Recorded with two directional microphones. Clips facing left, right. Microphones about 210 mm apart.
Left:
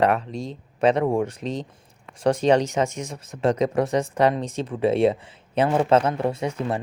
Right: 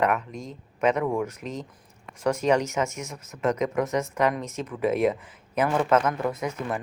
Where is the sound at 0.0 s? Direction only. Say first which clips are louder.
Left 4 dB; 30° left (ahead or behind).